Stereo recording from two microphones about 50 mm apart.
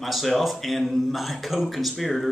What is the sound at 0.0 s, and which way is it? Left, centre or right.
A man's voice, centre.